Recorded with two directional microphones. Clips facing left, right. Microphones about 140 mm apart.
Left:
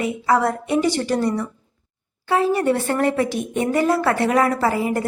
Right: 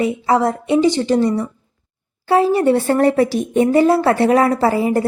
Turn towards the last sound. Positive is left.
turn(degrees=-30)  # may be behind; listen again after turning